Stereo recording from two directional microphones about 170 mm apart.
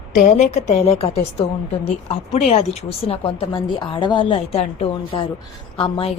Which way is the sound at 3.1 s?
30° left (ahead or behind).